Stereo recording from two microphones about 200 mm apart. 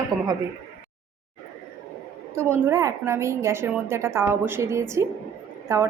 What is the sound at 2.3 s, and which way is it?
A woman's voice, 15° right (ahead or behind).